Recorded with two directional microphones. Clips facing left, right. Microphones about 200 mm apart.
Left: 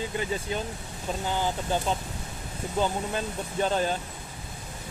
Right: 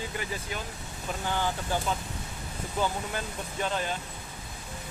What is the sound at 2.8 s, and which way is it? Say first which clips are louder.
Speech: left 3 dB; 30° left (ahead or behind).